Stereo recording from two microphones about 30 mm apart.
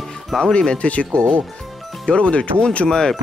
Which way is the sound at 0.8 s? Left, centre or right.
Left.